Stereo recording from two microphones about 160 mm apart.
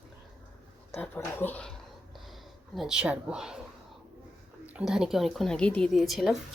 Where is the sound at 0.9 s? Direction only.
15° left (ahead or behind); by 3.6 s 5° right (ahead or behind).